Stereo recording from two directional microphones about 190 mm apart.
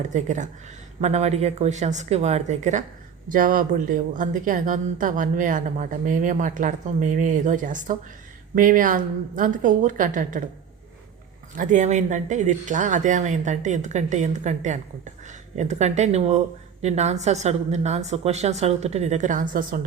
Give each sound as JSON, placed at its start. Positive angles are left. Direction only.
{"t": 0.0, "sound": "a woman's voice", "side_deg": -40}
{"t": 11.5, "sound": "speech", "side_deg": -40}